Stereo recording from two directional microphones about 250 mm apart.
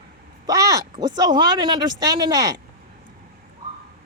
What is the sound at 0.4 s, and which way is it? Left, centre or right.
Speech, centre.